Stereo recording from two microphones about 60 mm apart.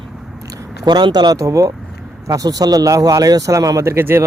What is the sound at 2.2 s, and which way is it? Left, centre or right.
Speech, right.